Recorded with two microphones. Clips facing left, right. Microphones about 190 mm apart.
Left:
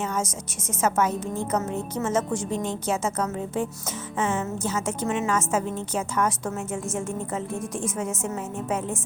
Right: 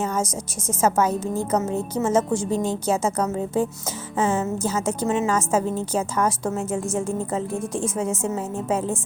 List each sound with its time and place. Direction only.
0.8 s a woman's voice: 35° right (ahead or behind)
7.8 s a woman's voice: 30° right (ahead or behind)